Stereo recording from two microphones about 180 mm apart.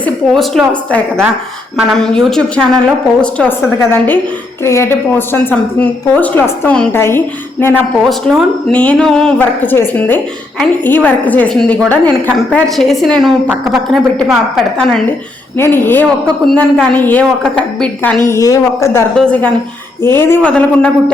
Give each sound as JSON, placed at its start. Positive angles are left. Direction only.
{"t": 0.0, "sound": "a woman's voice", "side_deg": 5}
{"t": 8.3, "sound": "a woman's voice", "side_deg": 5}
{"t": 18.3, "sound": "a woman's voice", "side_deg": 20}
{"t": 19.1, "sound": "a woman's voice", "side_deg": 5}